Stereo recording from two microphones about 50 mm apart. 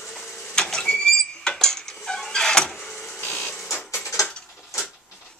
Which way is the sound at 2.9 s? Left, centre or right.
Centre.